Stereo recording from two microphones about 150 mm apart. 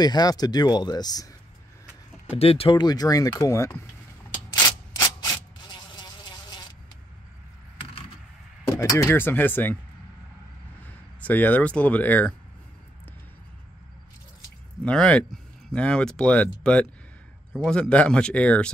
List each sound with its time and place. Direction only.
0.0 s speech: 25° left (ahead or behind)
2.3 s speech: 40° left (ahead or behind); by 3.8 s 20° left (ahead or behind)
5.2 s a sound: 25° left (ahead or behind)
8.7 s speech: 20° left (ahead or behind)
10.8 s speech: 10° left (ahead or behind)
14.9 s speech: 5° left (ahead or behind)